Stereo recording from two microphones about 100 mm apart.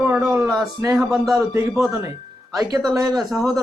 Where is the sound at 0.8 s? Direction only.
30° right (ahead or behind).